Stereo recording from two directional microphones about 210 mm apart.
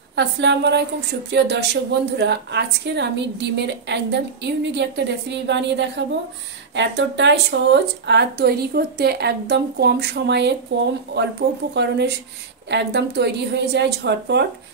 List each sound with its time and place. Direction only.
0.1 s a woman's voice: 55° right (ahead or behind)